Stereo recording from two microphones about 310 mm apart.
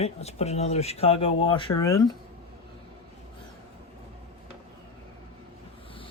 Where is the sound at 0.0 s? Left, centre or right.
Centre.